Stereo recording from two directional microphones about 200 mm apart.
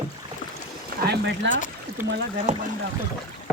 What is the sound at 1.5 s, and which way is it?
Speech, 40° left (ahead or behind).